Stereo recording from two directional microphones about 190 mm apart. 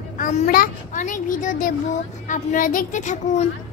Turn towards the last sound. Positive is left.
turn(degrees=40)  # may be behind; listen again after turning